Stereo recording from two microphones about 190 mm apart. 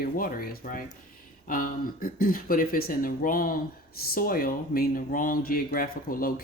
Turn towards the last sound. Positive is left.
turn(degrees=50)  # may be behind; listen again after turning